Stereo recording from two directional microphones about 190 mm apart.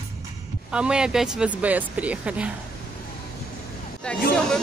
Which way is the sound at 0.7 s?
5° right (ahead or behind).